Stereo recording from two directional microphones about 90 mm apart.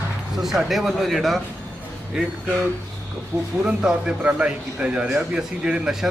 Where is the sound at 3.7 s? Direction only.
10° right (ahead or behind).